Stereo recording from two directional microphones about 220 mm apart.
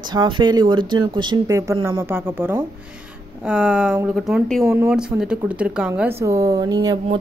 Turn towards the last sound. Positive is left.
turn(degrees=-15)  # may be behind; listen again after turning